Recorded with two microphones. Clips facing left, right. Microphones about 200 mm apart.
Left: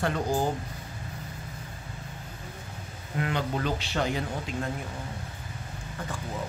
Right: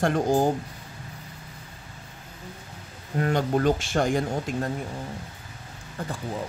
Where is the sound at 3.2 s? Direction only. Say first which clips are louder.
Right 6 dB; 45° right (ahead or behind).